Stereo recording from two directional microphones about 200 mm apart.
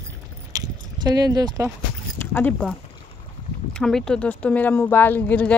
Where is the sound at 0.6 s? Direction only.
20° right (ahead or behind).